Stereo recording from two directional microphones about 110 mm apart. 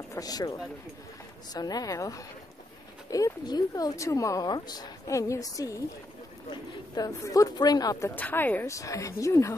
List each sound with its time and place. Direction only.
0.1 s speech: 35° left (ahead or behind)
8.1 s speech: 15° left (ahead or behind)
8.6 s speech: 30° left (ahead or behind)